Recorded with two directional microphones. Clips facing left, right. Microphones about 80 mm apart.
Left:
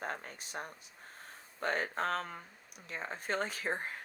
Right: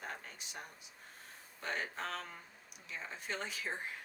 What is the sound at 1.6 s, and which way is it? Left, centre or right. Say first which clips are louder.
Speech: left 6 dB; left.